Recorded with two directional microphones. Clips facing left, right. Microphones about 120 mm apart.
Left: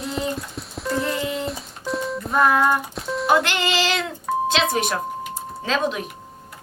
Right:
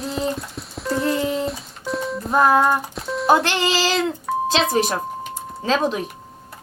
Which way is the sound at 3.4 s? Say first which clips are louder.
Right 2 dB; 35° right (ahead or behind).